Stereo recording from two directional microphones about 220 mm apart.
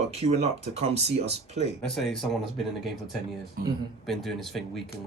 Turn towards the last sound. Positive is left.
turn(degrees=0)  # may be behind; listen again after turning